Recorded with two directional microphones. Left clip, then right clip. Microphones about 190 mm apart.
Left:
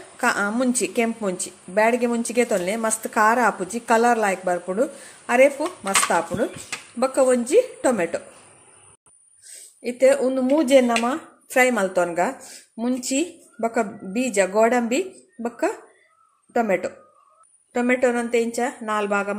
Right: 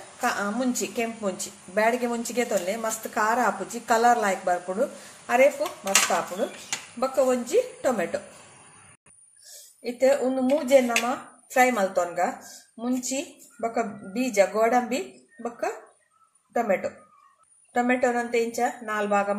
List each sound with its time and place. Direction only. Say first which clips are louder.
0.2 s a woman's voice: left 5 dB; 40° left (ahead or behind)
7.0 s a woman's voice: left 5 dB; 40° left (ahead or behind)
9.8 s speech: left 4 dB; 40° left (ahead or behind)
16.5 s a woman's voice: left 3 dB; 40° left (ahead or behind)